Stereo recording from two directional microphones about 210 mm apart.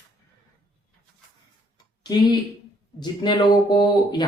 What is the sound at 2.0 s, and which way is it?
Speech, 20° left (ahead or behind).